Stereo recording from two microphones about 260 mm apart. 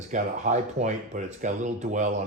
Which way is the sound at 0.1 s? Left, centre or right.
Right.